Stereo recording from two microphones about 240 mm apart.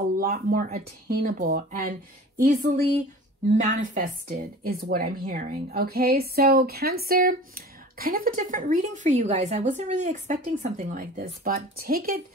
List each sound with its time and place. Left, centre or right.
0.2 s a woman's voice: right